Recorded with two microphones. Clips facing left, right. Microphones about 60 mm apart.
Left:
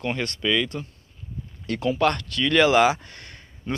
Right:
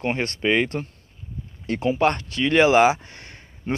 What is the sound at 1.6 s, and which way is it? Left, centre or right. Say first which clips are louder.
Speech: right 1 dB; right.